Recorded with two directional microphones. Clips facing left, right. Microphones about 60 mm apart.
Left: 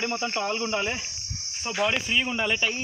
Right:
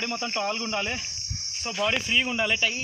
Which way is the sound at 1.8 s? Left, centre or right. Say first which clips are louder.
Right 1 dB; centre.